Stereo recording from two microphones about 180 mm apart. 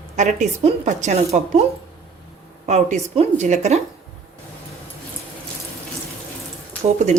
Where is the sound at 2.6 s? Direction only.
40° right (ahead or behind).